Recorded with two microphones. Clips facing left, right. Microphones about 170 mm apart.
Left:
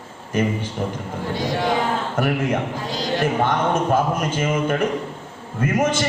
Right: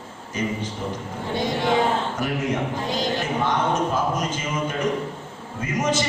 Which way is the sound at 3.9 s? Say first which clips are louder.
Left 4 dB; 55° left (ahead or behind).